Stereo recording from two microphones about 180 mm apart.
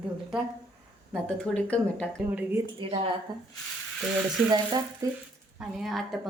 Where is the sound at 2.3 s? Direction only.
15° right (ahead or behind).